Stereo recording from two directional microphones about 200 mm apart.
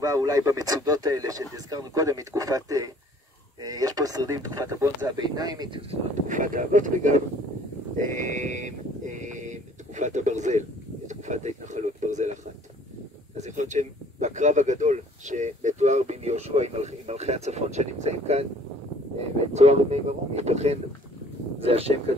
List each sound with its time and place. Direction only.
0.0 s speech: 15° right (ahead or behind); by 12.3 s 35° right (ahead or behind)
13.4 s speech: 35° right (ahead or behind)
19.5 s speech: 35° right (ahead or behind)